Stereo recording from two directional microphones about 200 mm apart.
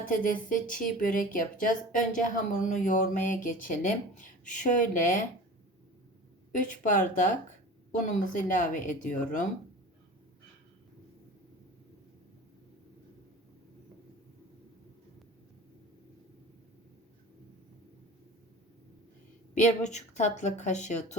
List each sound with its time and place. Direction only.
0.0 s speech: 45° left (ahead or behind)
6.5 s speech: 40° left (ahead or behind)
19.5 s speech: 35° left (ahead or behind)